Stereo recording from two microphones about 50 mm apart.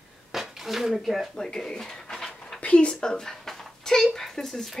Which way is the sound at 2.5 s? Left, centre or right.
Left.